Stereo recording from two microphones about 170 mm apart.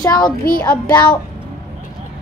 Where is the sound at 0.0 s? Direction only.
20° left (ahead or behind).